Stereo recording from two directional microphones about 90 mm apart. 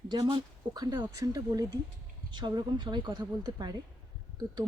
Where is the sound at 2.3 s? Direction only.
55° right (ahead or behind).